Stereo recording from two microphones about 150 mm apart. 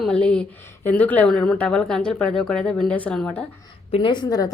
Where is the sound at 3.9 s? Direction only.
30° left (ahead or behind).